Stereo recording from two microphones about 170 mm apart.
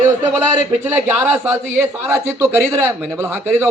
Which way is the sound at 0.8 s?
10° right (ahead or behind).